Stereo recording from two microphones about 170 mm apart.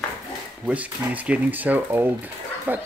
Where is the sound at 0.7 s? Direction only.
10° right (ahead or behind).